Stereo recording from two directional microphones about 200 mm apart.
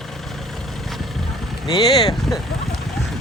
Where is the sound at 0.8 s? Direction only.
Centre (ahead or behind).